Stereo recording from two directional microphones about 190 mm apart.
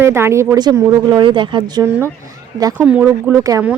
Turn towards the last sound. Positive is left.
turn(degrees=-15)  # may be behind; listen again after turning